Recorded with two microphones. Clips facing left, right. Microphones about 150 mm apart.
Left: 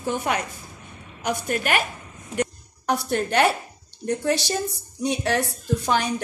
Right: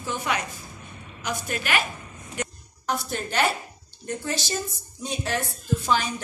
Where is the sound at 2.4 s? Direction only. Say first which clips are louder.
Left 7 dB; 60° left (ahead or behind).